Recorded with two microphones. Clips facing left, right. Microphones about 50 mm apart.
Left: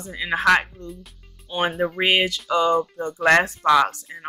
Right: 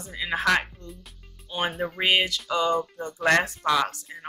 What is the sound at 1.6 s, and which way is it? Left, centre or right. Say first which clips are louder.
Speech: left 6 dB; left.